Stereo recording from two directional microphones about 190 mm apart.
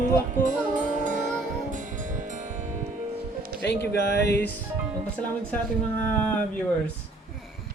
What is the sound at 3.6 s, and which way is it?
Speech, 65° left (ahead or behind).